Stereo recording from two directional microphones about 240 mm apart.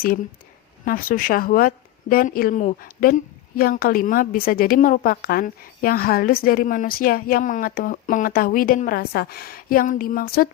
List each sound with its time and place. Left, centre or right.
0.9 s a woman's voice: left